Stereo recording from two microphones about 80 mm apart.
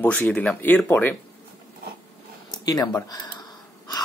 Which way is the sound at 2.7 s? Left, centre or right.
Left.